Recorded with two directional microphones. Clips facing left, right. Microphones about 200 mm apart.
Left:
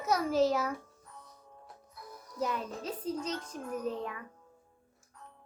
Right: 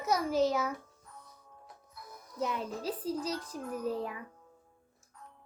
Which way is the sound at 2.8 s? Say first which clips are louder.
Right 1 dB; 35° right (ahead or behind).